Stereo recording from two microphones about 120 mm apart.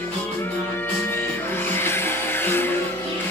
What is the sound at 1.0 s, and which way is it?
Music, 20° left (ahead or behind).